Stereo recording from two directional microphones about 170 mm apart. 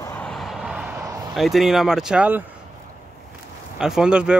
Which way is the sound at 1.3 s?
Centre (ahead or behind).